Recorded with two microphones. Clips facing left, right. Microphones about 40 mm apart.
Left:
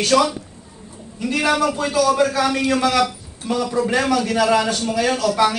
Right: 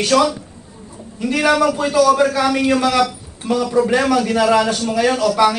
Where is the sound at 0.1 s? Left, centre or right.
Centre.